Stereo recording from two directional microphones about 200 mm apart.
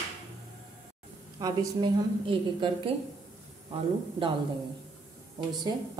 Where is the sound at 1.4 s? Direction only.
20° right (ahead or behind).